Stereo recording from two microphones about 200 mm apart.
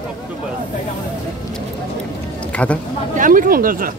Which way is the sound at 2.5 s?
5° left (ahead or behind).